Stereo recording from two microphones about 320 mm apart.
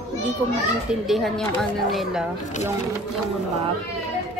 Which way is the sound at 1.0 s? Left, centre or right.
Centre.